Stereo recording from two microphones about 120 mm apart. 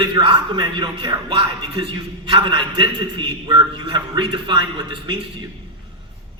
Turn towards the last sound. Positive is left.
turn(degrees=-45)  # may be behind; listen again after turning